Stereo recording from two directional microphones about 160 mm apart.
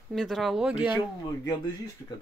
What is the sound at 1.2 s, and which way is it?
Speech, 25° left (ahead or behind).